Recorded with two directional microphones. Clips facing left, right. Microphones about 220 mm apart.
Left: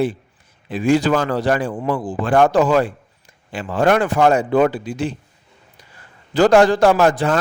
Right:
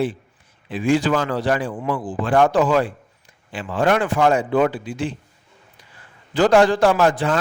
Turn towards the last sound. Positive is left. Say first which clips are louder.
# left 3 dB
turn(degrees=40)  # may be behind; listen again after turning